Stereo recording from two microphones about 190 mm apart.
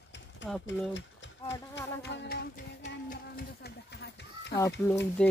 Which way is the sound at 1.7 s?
65° left (ahead or behind).